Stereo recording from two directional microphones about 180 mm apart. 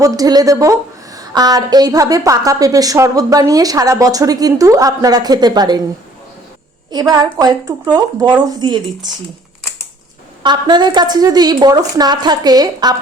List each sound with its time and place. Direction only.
0.0 s a woman's voice: 20° right (ahead or behind)
6.9 s a woman's voice: 20° right (ahead or behind)
10.4 s a woman's voice: 25° right (ahead or behind)